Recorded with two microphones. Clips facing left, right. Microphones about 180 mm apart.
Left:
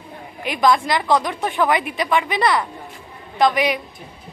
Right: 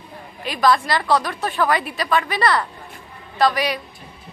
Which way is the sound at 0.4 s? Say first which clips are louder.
Left 1 dB; 15° left (ahead or behind).